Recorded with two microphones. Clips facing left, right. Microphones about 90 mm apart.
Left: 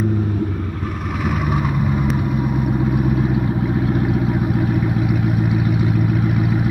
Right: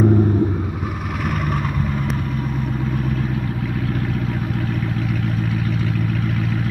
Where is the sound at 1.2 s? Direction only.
10° left (ahead or behind).